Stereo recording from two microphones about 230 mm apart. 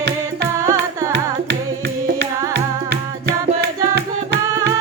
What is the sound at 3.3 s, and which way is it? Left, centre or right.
Music, right.